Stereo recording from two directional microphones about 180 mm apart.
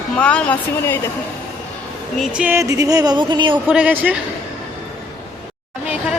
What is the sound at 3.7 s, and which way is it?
Speech, 10° right (ahead or behind).